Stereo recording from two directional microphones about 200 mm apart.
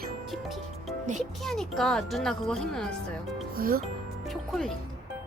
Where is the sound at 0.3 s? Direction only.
Centre (ahead or behind).